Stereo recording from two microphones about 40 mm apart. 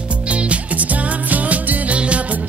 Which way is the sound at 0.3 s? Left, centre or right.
Right.